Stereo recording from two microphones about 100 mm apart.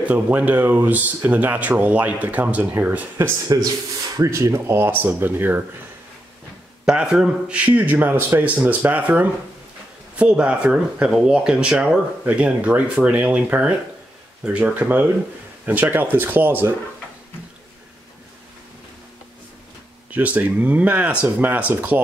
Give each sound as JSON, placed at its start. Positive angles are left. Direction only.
{"t": 0.0, "sound": "speech", "side_deg": -15}
{"t": 3.5, "sound": "speech", "side_deg": -40}
{"t": 6.9, "sound": "speech", "side_deg": -10}
{"t": 20.1, "sound": "speech", "side_deg": -15}